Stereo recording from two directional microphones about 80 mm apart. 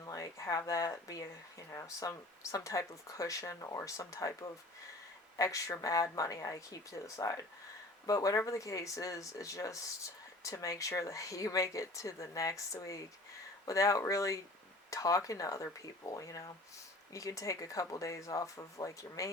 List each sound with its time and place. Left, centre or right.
0.0 s speech: left